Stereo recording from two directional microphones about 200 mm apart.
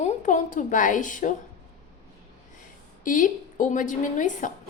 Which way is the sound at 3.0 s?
40° left (ahead or behind).